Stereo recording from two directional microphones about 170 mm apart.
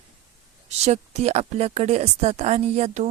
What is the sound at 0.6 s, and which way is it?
Speech, 40° right (ahead or behind).